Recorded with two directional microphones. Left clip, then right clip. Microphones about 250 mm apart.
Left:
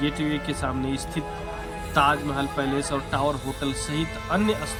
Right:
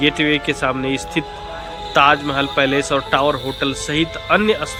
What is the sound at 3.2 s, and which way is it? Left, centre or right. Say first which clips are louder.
Speech: right 8 dB; centre.